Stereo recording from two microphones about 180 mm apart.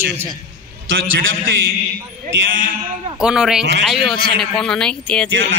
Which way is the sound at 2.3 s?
90° right.